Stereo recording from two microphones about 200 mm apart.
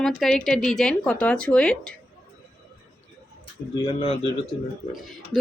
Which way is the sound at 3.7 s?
25° left (ahead or behind).